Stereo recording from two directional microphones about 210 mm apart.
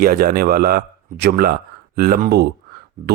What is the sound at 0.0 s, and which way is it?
Speech, 45° right (ahead or behind).